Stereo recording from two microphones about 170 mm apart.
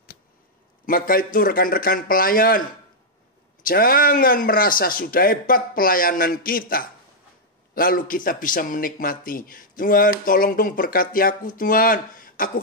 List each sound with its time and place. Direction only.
0.8 s a man's voice: 55° left (ahead or behind)
3.6 s a man's voice: 55° left (ahead or behind)